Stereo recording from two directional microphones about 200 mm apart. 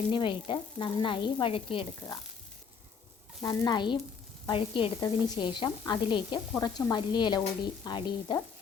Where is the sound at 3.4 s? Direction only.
20° left (ahead or behind).